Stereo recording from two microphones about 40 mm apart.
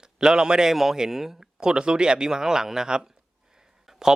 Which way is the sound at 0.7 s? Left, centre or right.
Centre.